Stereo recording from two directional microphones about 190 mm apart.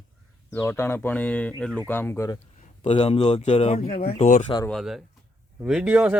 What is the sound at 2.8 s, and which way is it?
Speech, 30° left (ahead or behind).